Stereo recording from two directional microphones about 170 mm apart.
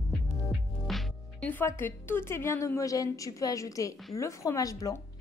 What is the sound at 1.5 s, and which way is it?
A woman's voice, 15° left (ahead or behind).